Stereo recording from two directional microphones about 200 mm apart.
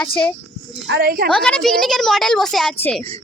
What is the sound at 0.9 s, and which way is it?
Speech, 50° right (ahead or behind).